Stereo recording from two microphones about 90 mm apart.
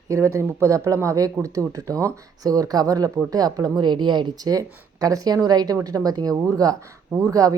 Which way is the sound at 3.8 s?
60° right (ahead or behind).